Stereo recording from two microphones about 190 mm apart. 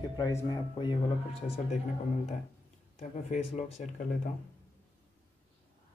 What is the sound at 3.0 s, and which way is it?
Speech, 35° left (ahead or behind).